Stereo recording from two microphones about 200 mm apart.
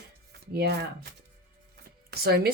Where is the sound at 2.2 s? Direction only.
50° right (ahead or behind).